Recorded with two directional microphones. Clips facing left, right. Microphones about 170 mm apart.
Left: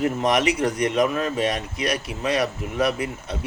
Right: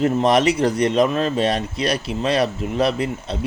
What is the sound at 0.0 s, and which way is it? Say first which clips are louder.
A man's voice: right 4 dB; 30° right (ahead or behind).